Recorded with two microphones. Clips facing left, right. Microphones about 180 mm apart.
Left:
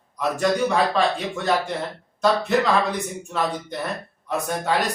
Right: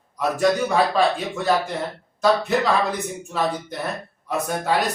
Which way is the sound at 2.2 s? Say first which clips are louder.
Even; centre (ahead or behind).